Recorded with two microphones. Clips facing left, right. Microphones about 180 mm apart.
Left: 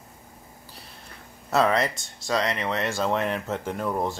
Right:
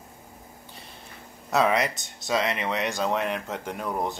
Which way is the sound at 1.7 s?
20° right (ahead or behind).